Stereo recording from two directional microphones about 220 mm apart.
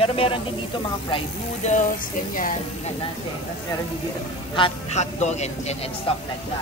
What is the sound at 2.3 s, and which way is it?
Speech, 40° left (ahead or behind).